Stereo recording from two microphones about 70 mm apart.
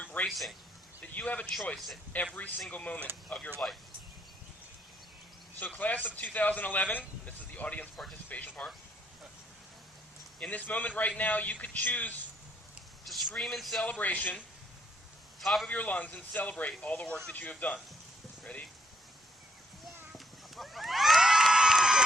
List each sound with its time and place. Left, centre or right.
0.0 s a sound: left
0.3 s speech: centre
1.0 s speech: centre
1.7 s speech: centre
2.7 s speech: left
5.5 s speech: left
10.4 s speech: left
13.1 s vehicle: centre
13.4 s speech: centre
13.8 s speech: centre
15.4 s a man's voice: centre
15.6 s speech: left
20.1 s a sound: centre